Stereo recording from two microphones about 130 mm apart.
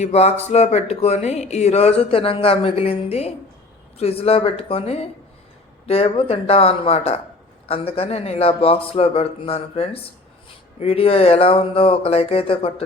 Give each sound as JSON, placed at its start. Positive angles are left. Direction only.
{"t": 0.0, "sound": "speech", "side_deg": 55}